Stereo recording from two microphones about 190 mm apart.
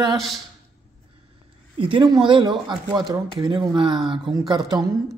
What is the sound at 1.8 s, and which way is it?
A man's voice, 25° right (ahead or behind).